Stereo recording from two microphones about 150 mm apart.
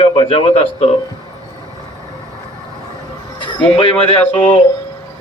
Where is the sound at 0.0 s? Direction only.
35° left (ahead or behind).